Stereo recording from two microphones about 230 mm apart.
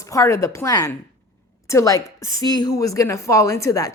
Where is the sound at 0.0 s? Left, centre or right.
Centre.